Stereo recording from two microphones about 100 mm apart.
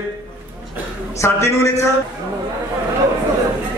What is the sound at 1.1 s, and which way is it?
Speech, 30° left (ahead or behind).